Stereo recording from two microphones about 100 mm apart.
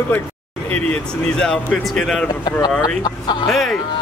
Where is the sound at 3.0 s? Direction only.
45° left (ahead or behind).